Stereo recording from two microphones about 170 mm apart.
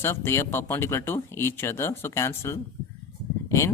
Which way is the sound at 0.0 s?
15° left (ahead or behind).